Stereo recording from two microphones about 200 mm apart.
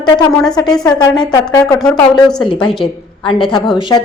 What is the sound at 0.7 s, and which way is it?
Speech, 5° left (ahead or behind).